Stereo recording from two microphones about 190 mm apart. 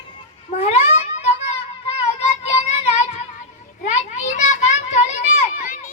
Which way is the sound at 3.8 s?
40° left (ahead or behind).